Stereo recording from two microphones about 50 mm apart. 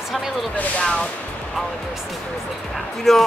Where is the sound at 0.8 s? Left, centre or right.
Centre.